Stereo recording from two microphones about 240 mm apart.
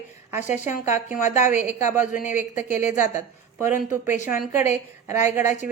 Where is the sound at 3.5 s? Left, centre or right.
Centre.